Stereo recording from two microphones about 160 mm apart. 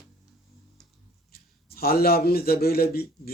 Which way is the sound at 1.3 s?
70° left (ahead or behind).